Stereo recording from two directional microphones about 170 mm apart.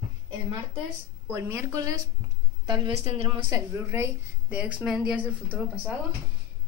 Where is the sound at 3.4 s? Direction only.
15° right (ahead or behind).